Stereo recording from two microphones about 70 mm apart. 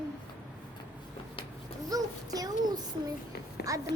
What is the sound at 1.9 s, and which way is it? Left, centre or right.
Speech, right.